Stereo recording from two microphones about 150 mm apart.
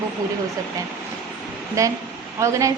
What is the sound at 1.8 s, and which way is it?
Speech, 20° right (ahead or behind).